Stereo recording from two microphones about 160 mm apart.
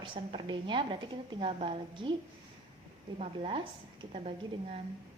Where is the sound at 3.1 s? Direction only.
45° right (ahead or behind).